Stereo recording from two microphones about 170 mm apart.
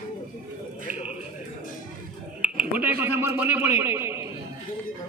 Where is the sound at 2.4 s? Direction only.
10° right (ahead or behind).